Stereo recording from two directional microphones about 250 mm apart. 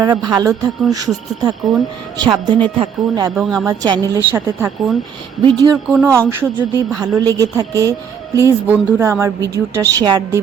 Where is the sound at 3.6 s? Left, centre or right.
Centre.